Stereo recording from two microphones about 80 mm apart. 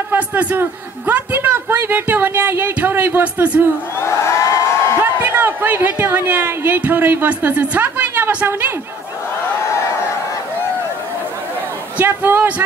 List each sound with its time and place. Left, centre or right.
0.1 s a man's voice: right
4.0 s a sound: left
5.2 s a man's voice: right
12.0 s a man's voice: right